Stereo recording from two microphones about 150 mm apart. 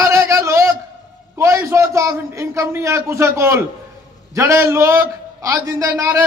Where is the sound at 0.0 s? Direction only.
15° right (ahead or behind).